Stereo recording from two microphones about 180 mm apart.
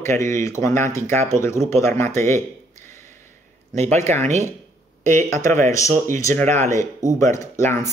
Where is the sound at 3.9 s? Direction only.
15° left (ahead or behind).